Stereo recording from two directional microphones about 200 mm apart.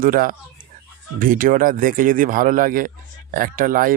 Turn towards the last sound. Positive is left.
turn(degrees=-45)  # may be behind; listen again after turning